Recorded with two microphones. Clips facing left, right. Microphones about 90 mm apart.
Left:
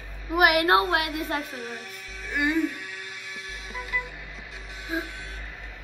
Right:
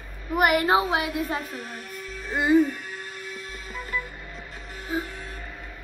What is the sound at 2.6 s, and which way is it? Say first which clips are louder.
Music: left 1 dB; 45° right (ahead or behind).